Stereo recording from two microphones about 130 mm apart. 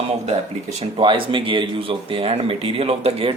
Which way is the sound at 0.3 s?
50° right (ahead or behind).